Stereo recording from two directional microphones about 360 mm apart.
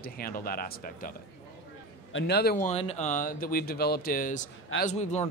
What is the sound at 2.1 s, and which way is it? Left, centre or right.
Speech, left.